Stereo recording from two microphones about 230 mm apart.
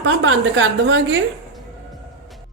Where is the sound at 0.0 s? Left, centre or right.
Right.